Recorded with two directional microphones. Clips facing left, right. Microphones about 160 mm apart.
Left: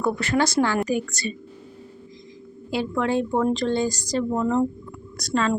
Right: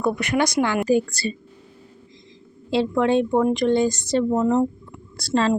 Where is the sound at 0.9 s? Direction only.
30° right (ahead or behind).